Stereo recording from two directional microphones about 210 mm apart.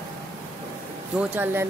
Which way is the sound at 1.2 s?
10° right (ahead or behind).